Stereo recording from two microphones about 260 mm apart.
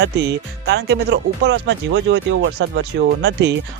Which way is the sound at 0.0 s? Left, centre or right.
Right.